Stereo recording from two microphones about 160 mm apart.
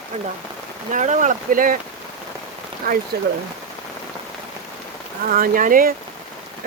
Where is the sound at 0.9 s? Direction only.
50° right (ahead or behind).